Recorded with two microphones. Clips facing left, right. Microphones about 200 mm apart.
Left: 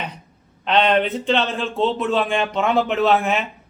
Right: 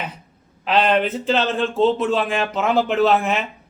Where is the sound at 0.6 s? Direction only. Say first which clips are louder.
Even; 5° right (ahead or behind).